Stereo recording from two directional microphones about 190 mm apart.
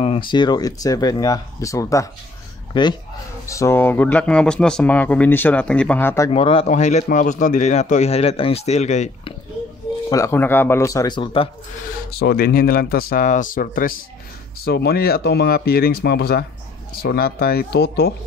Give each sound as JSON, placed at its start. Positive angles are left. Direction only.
{"t": 0.0, "sound": "speech", "side_deg": 25}
{"t": 6.3, "sound": "a man's voice", "side_deg": 30}
{"t": 10.0, "sound": "speech", "side_deg": 15}
{"t": 12.1, "sound": "speech", "side_deg": 55}